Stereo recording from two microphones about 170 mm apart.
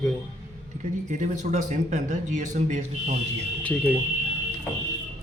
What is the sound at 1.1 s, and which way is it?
A man's voice, 45° right (ahead or behind).